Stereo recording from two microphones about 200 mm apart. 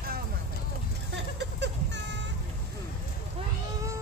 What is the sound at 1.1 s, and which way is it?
Vehicle, 60° right (ahead or behind).